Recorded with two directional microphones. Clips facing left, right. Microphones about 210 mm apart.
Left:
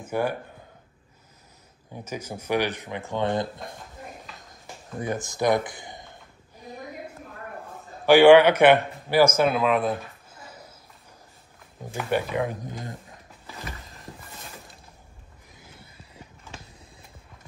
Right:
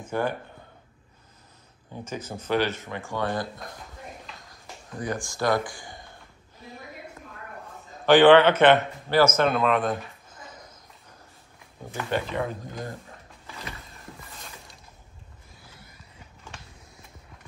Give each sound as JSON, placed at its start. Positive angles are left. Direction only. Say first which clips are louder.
{"t": 0.0, "sound": "speech", "louder": "left 1 dB", "side_deg": 10}
{"t": 2.0, "sound": "speech", "louder": "even", "side_deg": 10}
{"t": 4.5, "sound": "a sound", "louder": "left 2 dB", "side_deg": 25}
{"t": 8.0, "sound": "speech", "louder": "left 2 dB", "side_deg": 10}
{"t": 11.9, "sound": "speech", "louder": "left 2 dB", "side_deg": 15}